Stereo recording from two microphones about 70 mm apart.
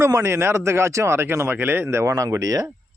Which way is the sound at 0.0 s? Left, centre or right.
Right.